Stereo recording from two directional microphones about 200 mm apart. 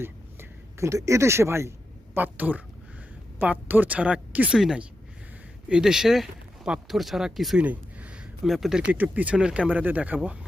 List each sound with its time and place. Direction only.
0.0 s speech: 15° right (ahead or behind)